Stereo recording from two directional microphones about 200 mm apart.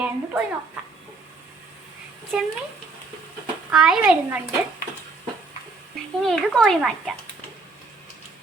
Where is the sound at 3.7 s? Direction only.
5° right (ahead or behind).